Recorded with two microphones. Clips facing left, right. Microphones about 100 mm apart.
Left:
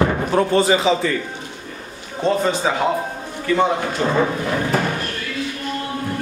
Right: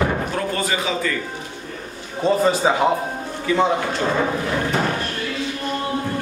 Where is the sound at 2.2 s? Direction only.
5° right (ahead or behind).